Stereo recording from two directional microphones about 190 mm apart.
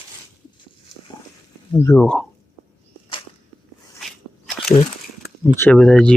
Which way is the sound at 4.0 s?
Centre (ahead or behind).